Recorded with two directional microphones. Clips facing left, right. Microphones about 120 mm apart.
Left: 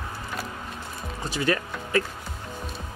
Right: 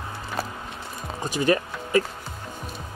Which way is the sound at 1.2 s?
15° right (ahead or behind).